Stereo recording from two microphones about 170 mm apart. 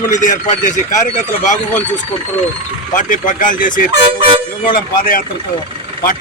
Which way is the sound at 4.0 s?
30° right (ahead or behind).